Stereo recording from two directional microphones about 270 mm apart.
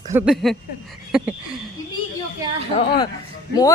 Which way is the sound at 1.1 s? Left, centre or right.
Centre.